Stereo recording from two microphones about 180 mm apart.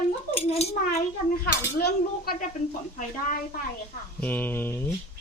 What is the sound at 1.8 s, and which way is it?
Speech, 55° left (ahead or behind).